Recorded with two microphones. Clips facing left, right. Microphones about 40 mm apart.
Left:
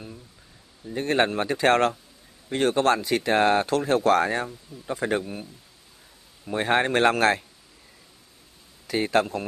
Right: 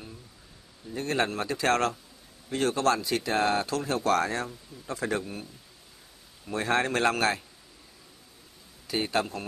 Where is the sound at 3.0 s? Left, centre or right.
Left.